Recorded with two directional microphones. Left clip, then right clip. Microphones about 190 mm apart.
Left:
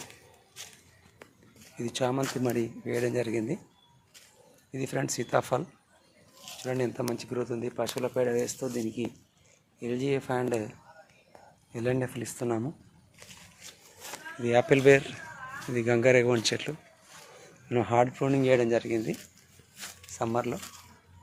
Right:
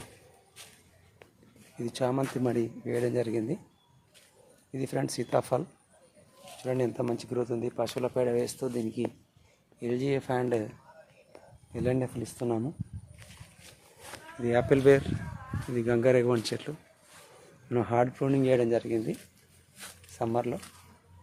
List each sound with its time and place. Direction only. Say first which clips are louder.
0.6 s a sound: left 5 dB; 40° left (ahead or behind)
1.7 s speech: even; 10° right (ahead or behind)
4.7 s speech: even; 15° right (ahead or behind)
11.7 s speech: even; 15° right (ahead or behind)
13.6 s a sound: left 6 dB; 55° left (ahead or behind)
14.4 s speech: left 1 dB; 15° right (ahead or behind)
20.1 s speech: even; 15° right (ahead or behind)